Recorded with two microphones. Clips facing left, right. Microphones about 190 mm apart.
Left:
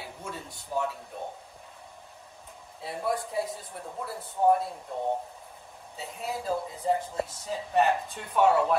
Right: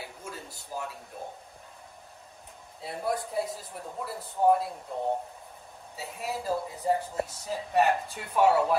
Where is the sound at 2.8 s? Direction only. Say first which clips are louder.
Left 1 dB; centre (ahead or behind).